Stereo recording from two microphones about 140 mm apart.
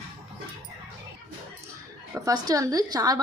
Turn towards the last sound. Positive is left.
turn(degrees=-30)  # may be behind; listen again after turning